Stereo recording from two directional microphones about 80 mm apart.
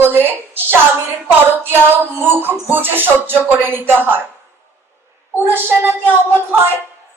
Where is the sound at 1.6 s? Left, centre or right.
Right.